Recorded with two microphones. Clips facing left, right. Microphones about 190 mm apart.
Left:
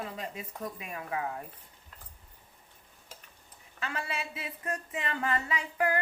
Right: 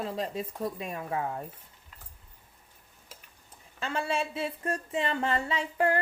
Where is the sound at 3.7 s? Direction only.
30° right (ahead or behind).